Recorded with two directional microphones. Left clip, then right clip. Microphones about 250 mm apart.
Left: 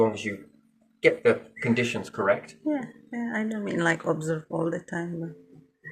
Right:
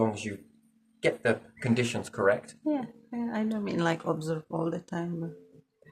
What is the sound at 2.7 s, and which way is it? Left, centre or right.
A woman's voice, centre.